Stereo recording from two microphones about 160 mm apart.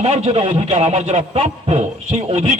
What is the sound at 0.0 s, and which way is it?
A man's voice, 45° right (ahead or behind).